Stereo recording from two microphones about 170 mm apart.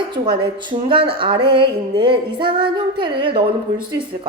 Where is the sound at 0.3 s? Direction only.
30° right (ahead or behind).